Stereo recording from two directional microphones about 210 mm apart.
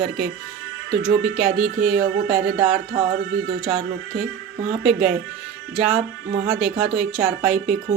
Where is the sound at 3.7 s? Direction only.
5° right (ahead or behind).